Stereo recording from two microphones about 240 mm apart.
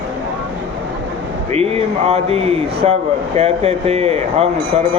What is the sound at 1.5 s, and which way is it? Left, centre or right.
Speech, right.